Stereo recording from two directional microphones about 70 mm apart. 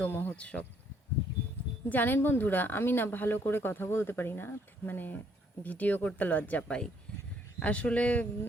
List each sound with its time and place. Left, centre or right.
0.0 s speech: left
0.3 s speech: centre
1.9 s speech: left